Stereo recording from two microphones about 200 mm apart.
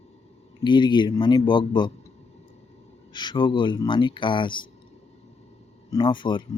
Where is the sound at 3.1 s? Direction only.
25° left (ahead or behind).